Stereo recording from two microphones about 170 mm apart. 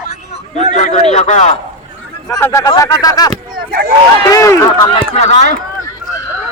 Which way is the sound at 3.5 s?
60° right (ahead or behind).